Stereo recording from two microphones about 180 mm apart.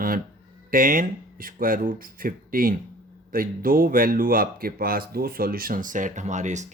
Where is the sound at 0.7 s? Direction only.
50° right (ahead or behind).